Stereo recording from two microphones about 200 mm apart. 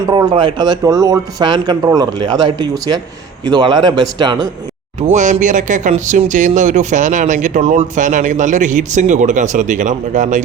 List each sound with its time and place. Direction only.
0.1 s speech: 20° right (ahead or behind)
5.1 s speech: 35° right (ahead or behind)